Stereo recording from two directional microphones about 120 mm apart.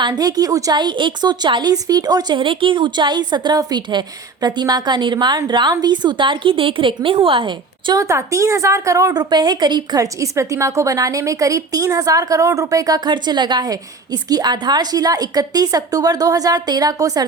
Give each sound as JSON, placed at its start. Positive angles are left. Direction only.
{"t": 0.0, "sound": "a woman's voice", "side_deg": -35}
{"t": 7.9, "sound": "a woman's voice", "side_deg": -25}